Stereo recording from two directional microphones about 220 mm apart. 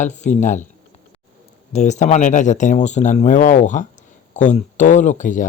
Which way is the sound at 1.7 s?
30° left (ahead or behind).